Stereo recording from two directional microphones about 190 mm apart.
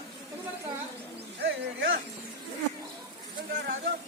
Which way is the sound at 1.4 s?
70° right (ahead or behind).